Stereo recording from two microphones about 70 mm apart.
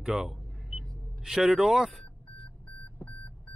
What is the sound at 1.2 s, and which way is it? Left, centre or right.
Speech, centre.